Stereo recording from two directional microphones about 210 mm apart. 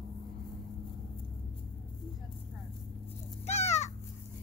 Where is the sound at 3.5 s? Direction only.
30° left (ahead or behind).